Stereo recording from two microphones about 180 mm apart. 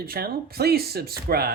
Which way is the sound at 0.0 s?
55° right (ahead or behind).